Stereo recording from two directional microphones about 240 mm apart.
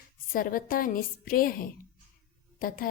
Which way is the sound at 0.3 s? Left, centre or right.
Left.